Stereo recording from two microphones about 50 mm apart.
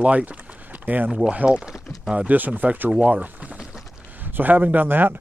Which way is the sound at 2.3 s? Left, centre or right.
Right.